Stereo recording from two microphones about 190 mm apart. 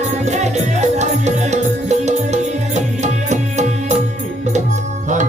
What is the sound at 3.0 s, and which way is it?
Music, 35° right (ahead or behind).